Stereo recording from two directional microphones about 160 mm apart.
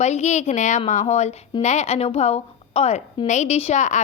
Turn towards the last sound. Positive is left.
turn(degrees=45)  # may be behind; listen again after turning